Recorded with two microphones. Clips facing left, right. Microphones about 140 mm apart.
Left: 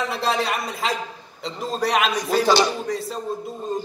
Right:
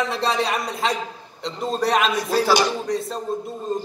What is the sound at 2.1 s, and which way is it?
Speech, 20° left (ahead or behind).